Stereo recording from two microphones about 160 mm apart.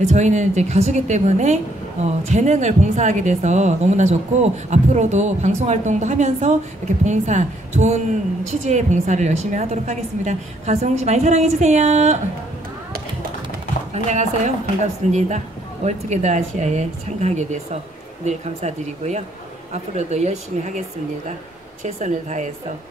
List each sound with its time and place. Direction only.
0.0 s a woman's voice: 45° right (ahead or behind)
13.9 s a woman's voice: 45° right (ahead or behind)
21.8 s a woman's voice: 50° right (ahead or behind)